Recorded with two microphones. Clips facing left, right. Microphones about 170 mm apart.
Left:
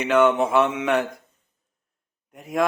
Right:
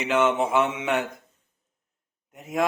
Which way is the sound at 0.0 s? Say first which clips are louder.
Left 4 dB; 20° right (ahead or behind).